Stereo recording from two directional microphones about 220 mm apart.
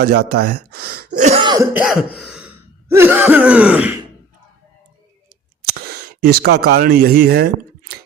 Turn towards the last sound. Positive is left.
turn(degrees=-45)  # may be behind; listen again after turning